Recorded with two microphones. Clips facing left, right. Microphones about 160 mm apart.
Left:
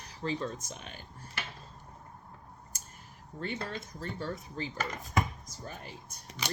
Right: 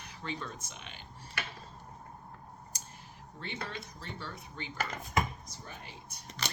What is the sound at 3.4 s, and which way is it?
Dishes, 45° left (ahead or behind).